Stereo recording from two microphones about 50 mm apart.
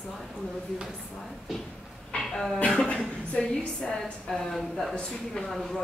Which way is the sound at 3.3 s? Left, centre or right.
Centre.